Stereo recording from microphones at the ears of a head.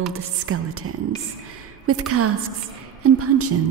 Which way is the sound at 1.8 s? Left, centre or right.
Right.